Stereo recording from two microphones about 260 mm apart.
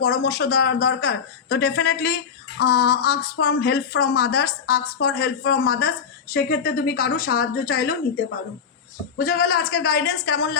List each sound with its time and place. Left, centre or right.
0.0 s speech: left